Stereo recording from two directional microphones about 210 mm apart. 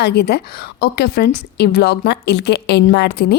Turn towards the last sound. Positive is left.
turn(degrees=50)  # may be behind; listen again after turning